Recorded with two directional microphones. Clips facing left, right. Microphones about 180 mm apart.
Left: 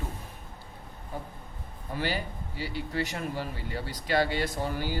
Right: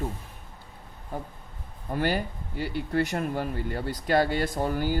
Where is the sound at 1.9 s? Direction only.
50° right (ahead or behind).